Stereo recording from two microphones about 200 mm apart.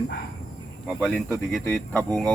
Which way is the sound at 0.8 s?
Centre (ahead or behind).